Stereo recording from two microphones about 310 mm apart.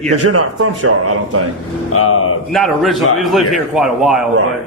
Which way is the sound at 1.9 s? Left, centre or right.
Left.